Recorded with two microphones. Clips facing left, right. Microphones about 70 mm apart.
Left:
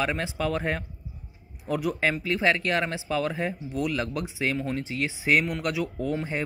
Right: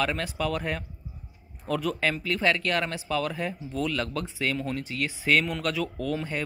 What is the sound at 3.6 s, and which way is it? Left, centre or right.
Speech, centre.